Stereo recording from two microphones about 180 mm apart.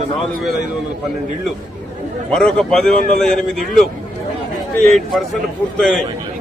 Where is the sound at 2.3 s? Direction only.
5° left (ahead or behind).